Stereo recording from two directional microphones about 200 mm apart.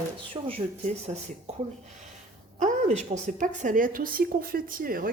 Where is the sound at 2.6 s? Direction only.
35° right (ahead or behind).